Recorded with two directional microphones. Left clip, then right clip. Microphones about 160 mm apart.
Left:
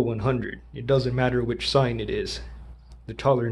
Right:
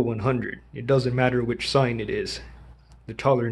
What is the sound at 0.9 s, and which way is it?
Speech, 20° right (ahead or behind).